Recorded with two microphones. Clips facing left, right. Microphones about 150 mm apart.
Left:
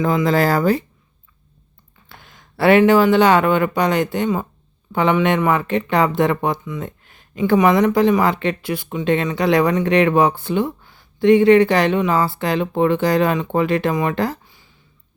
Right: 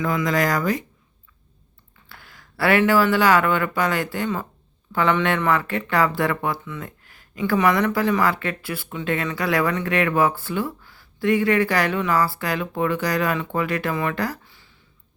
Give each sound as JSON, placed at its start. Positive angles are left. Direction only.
{"t": 0.0, "sound": "speech", "side_deg": 25}
{"t": 2.0, "sound": "speech", "side_deg": 20}